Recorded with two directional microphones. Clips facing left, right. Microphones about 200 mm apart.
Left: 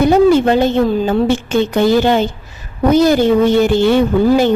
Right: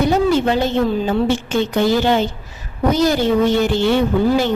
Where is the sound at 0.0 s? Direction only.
50° left (ahead or behind).